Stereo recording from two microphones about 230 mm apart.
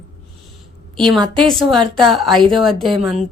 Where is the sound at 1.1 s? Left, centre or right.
Centre.